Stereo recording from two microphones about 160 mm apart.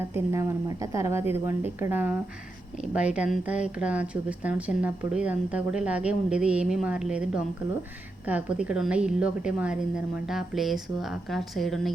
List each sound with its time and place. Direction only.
0.1 s a woman's voice: 15° right (ahead or behind)
8.3 s a woman's voice: 10° right (ahead or behind)